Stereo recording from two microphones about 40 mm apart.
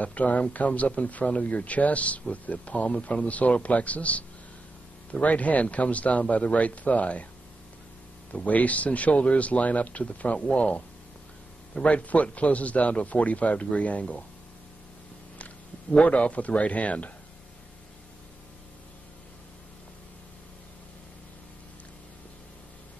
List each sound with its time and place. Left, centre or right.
0.0 s speech: left
8.3 s speech: left
11.8 s speech: left
16.0 s speech: left